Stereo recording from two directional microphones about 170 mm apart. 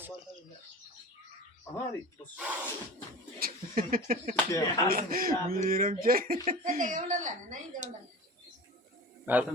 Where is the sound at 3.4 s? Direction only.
55° right (ahead or behind).